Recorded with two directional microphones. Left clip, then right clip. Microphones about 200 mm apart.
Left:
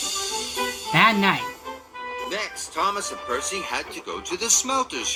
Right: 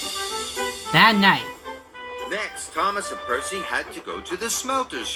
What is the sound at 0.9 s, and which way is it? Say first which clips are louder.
Speech: right 3 dB; 15° right (ahead or behind).